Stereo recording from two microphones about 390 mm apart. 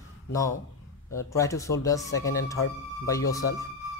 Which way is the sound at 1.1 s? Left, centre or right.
Centre.